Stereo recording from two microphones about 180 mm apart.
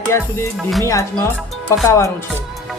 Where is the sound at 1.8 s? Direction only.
15° left (ahead or behind).